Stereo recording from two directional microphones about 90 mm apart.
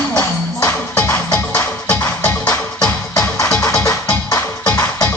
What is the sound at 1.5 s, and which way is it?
Music, 20° left (ahead or behind).